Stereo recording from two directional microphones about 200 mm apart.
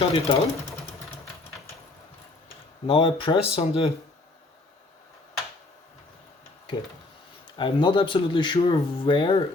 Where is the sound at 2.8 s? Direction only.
25° left (ahead or behind).